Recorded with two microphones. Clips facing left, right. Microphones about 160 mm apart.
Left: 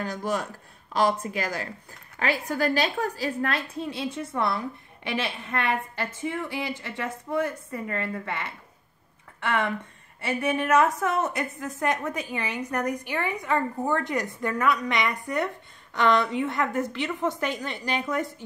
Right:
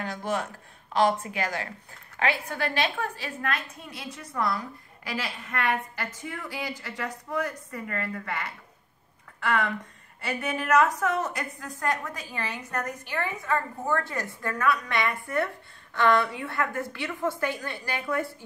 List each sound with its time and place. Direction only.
0.0 s a woman's voice: 40° left (ahead or behind); by 18.3 s 20° left (ahead or behind)